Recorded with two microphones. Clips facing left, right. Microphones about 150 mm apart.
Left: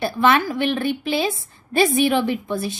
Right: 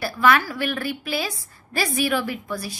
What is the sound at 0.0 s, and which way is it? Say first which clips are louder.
A woman's voice: left 2 dB; 20° left (ahead or behind).